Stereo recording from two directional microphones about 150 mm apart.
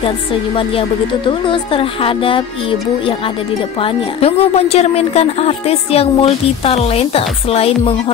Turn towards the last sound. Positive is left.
turn(degrees=40)  # may be behind; listen again after turning